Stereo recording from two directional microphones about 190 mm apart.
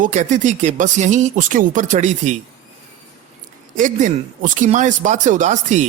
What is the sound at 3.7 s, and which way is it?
Speech, 45° right (ahead or behind).